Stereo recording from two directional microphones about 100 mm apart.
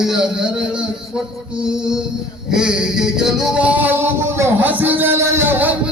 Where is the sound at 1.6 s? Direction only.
5° right (ahead or behind).